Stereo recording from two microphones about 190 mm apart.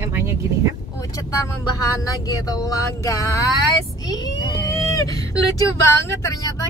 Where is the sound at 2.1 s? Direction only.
20° left (ahead or behind).